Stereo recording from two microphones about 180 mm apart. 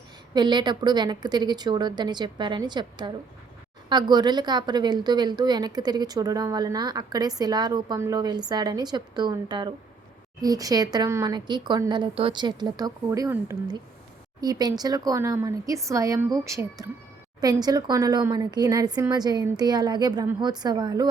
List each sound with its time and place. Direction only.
0.3 s a woman's voice: 25° right (ahead or behind)